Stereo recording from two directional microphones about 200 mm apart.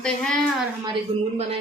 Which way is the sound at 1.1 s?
30° right (ahead or behind).